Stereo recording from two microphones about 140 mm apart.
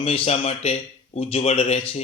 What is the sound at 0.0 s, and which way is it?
Speech, 45° left (ahead or behind).